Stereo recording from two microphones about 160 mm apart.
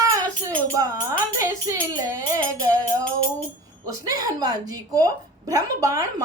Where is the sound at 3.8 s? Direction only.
25° right (ahead or behind).